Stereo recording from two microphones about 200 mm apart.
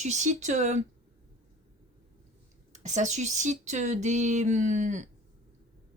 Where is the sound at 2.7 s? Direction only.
35° right (ahead or behind).